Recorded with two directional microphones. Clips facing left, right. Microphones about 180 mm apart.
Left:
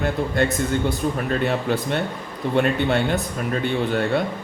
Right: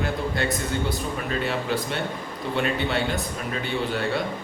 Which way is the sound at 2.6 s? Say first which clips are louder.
Left 5 dB; 50° left (ahead or behind).